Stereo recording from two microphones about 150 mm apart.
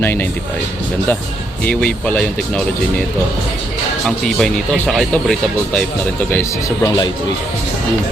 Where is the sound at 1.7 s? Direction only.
5° left (ahead or behind).